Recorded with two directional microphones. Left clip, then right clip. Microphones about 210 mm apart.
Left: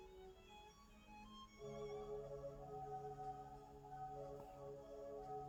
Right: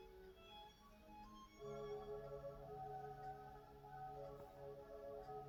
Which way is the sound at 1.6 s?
30° left (ahead or behind).